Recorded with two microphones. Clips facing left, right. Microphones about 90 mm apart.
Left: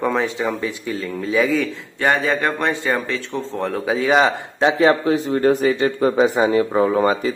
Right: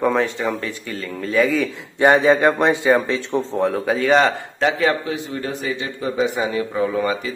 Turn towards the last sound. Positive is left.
turn(degrees=35)  # may be behind; listen again after turning